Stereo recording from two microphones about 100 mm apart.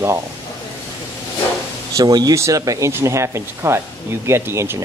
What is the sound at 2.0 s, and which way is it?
Speech, 40° right (ahead or behind).